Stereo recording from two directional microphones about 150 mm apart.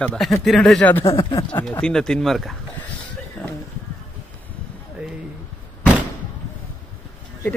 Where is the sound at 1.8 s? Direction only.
5° left (ahead or behind).